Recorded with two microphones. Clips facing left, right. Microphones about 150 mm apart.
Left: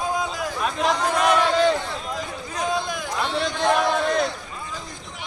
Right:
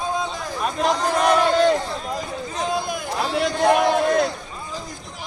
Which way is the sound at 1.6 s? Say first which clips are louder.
Right 2 dB; 40° right (ahead or behind).